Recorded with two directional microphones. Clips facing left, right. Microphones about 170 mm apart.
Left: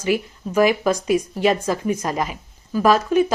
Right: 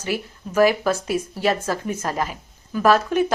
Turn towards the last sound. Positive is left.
turn(degrees=10)  # may be behind; listen again after turning